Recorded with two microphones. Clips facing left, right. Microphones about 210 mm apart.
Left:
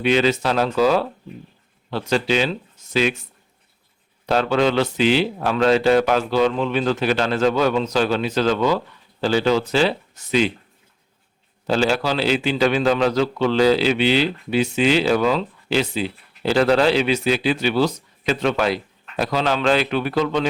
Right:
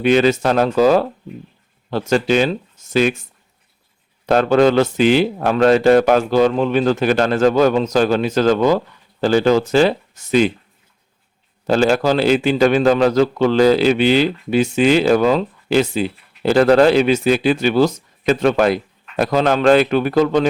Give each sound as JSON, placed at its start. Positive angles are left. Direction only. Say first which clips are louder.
{"t": 0.0, "sound": "a man's voice", "louder": "right 4 dB", "side_deg": -50}
{"t": 4.3, "sound": "a man's voice", "louder": "right 5 dB", "side_deg": -50}
{"t": 11.6, "sound": "a man's voice", "louder": "right 5 dB", "side_deg": -50}